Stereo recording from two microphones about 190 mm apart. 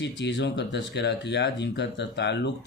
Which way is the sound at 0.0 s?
65° left (ahead or behind).